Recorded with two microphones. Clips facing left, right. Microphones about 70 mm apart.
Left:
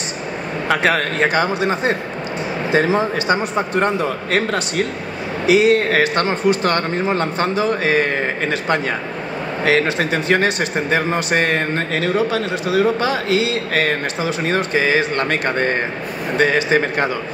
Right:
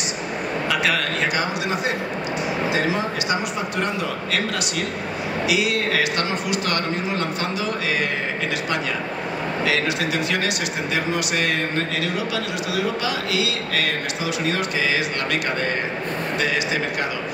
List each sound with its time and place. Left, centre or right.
0.7 s a man's voice: left
9.7 s a man's voice: left